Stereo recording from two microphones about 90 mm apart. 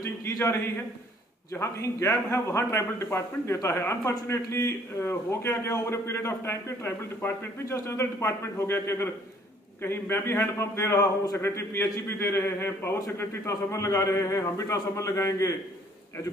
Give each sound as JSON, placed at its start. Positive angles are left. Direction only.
{"t": 0.0, "sound": "a man's voice", "side_deg": 40}